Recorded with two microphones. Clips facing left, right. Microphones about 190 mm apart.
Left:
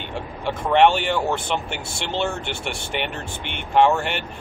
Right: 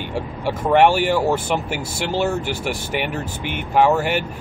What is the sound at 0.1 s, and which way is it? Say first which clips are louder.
Speech: right 2 dB; 10° right (ahead or behind).